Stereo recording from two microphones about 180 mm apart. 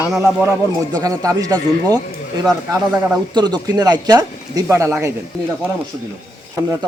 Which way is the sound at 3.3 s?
20° right (ahead or behind).